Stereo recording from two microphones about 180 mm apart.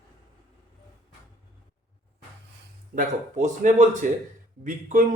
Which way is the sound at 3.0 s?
45° right (ahead or behind).